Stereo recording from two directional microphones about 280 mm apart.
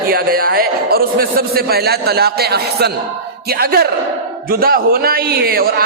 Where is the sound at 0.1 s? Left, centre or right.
Right.